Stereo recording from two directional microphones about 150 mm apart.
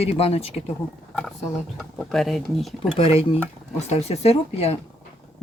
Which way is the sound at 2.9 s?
40° left (ahead or behind).